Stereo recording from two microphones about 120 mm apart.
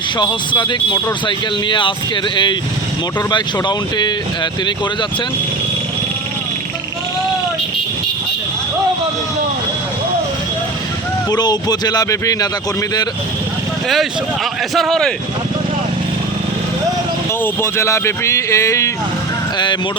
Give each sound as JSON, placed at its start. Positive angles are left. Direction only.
{"t": 0.2, "sound": "speech", "side_deg": 40}
{"t": 11.3, "sound": "speech", "side_deg": 35}
{"t": 13.8, "sound": "speech", "side_deg": 0}
{"t": 17.4, "sound": "speech", "side_deg": 20}